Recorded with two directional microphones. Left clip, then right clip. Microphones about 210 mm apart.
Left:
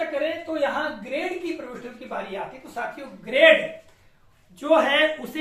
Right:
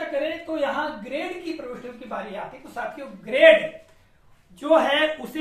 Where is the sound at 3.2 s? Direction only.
5° right (ahead or behind).